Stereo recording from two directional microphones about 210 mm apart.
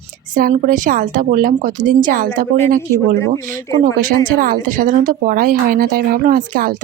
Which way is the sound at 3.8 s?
40° right (ahead or behind).